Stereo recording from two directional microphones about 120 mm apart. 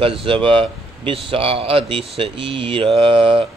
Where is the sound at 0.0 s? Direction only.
50° right (ahead or behind).